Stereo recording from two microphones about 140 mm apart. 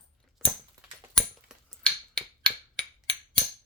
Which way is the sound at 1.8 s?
5° left (ahead or behind).